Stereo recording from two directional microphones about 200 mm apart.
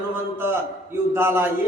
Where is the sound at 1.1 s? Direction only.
10° right (ahead or behind).